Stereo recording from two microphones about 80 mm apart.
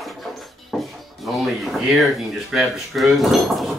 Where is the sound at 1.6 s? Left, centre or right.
Centre.